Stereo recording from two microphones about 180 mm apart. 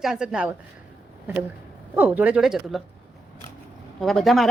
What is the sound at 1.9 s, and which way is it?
Speech, 10° right (ahead or behind).